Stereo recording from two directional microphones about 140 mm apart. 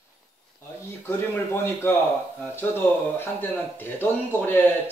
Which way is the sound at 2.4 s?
15° left (ahead or behind).